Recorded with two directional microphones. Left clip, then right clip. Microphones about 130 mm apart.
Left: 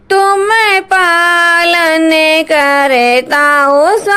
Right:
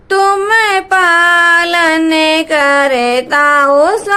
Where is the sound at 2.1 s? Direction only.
30° left (ahead or behind).